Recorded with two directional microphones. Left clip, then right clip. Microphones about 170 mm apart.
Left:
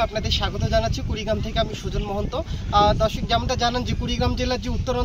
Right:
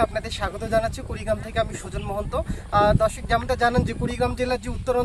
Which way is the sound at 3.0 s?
40° right (ahead or behind).